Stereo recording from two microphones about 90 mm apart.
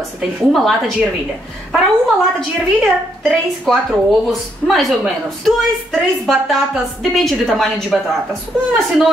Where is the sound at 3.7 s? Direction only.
5° left (ahead or behind).